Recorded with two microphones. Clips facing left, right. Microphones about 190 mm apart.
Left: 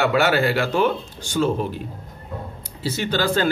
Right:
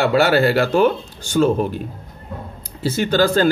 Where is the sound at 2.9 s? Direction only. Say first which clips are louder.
Right 5 dB; 45° right (ahead or behind).